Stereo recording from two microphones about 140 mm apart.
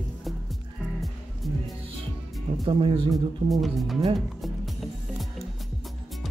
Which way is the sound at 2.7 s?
40° right (ahead or behind).